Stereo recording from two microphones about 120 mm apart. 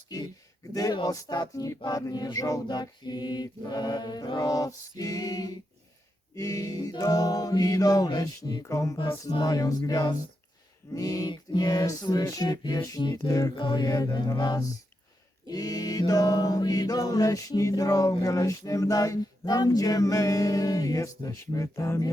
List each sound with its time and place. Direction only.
0.1 s music: 30° left (ahead or behind)